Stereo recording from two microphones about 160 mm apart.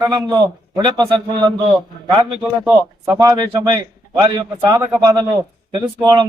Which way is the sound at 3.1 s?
25° right (ahead or behind).